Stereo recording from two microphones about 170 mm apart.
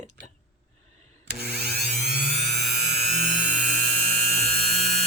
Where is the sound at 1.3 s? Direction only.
75° right (ahead or behind).